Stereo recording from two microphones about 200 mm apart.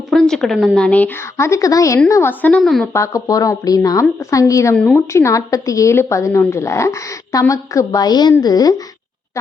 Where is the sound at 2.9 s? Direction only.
15° left (ahead or behind).